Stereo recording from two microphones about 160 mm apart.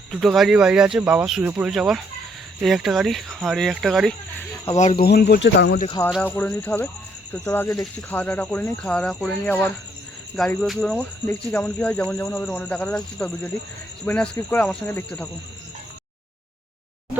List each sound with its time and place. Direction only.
0.1 s speech: centre (ahead or behind)
4.9 s speech: 85° left
6.2 s speech: 15° left (ahead or behind)